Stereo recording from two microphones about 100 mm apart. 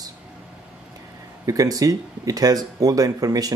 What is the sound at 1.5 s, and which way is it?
Speech, 35° right (ahead or behind).